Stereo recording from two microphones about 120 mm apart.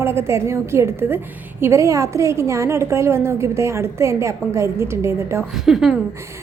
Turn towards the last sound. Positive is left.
turn(degrees=0)  # may be behind; listen again after turning